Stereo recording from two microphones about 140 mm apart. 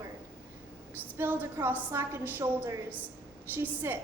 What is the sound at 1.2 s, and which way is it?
A woman's voice, 15° right (ahead or behind).